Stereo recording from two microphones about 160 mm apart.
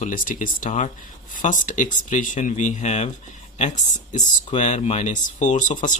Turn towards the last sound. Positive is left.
turn(degrees=50)  # may be behind; listen again after turning